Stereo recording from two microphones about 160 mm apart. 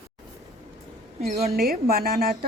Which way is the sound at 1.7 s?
70° right (ahead or behind).